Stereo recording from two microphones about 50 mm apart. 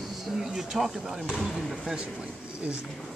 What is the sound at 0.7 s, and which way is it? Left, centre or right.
Speech, centre.